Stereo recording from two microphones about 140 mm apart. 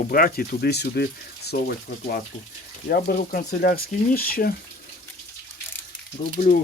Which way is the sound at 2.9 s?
90° left.